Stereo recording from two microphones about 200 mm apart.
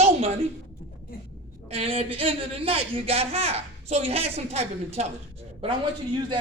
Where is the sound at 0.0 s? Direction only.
30° right (ahead or behind).